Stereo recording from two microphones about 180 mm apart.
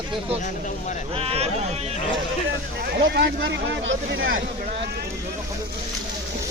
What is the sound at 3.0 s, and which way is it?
Speech, 70° right (ahead or behind).